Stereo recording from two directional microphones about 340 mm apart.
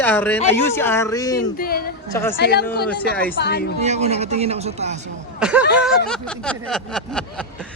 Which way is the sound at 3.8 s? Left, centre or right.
Centre.